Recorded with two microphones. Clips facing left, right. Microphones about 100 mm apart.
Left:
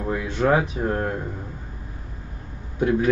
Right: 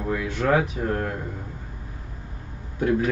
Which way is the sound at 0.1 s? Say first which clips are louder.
Left 2 dB; 25° left (ahead or behind).